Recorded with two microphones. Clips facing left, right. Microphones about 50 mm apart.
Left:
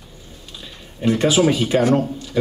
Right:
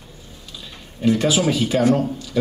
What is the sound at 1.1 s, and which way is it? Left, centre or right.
Speech, left.